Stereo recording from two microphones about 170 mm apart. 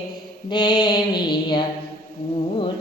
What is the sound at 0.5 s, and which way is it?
Mantra, 25° left (ahead or behind).